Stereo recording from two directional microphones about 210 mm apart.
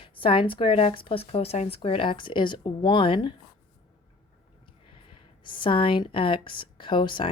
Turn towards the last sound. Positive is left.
turn(degrees=25)  # may be behind; listen again after turning